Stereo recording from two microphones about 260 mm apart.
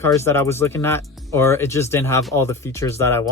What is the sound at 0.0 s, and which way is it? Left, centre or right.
Speech, centre.